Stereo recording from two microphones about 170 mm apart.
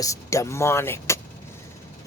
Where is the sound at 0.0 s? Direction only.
20° left (ahead or behind).